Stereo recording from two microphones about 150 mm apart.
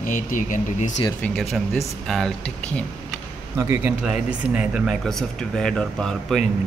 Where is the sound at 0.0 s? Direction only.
65° left (ahead or behind).